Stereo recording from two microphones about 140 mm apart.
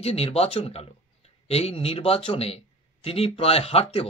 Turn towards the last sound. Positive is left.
turn(degrees=45)  # may be behind; listen again after turning